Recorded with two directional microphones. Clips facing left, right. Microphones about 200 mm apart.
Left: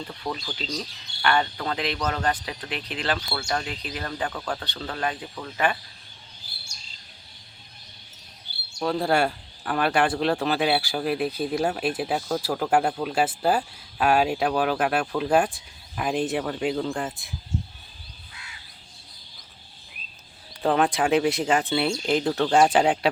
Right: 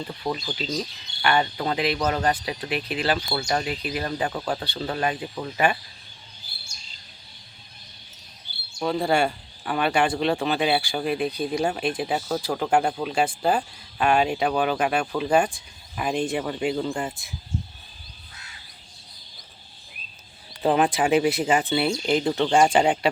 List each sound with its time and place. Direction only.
0.1 s speech: 15° right (ahead or behind)
4.3 s speech: 20° right (ahead or behind)
4.6 s speech: 10° right (ahead or behind)
8.8 s speech: centre (ahead or behind)
20.6 s speech: 5° right (ahead or behind)